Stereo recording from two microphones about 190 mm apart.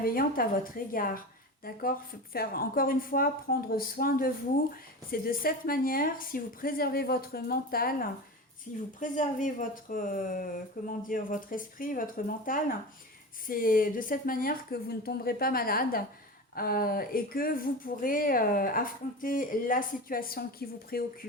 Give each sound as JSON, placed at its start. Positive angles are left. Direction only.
{"t": 0.0, "sound": "speech", "side_deg": 50}